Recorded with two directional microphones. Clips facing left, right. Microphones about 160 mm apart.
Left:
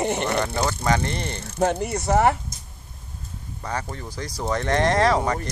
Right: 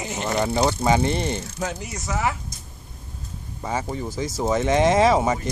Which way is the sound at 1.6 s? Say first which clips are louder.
Left 7 dB; 55° left (ahead or behind).